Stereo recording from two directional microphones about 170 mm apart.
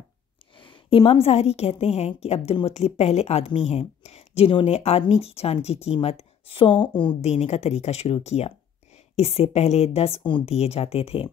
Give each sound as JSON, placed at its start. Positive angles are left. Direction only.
{"t": 0.6, "sound": "a woman's voice", "side_deg": 30}